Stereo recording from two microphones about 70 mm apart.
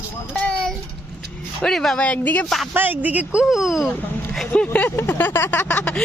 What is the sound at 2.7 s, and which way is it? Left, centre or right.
Speech, right.